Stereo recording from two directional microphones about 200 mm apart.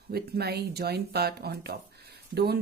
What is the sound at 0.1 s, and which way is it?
A woman's voice, 55° right (ahead or behind).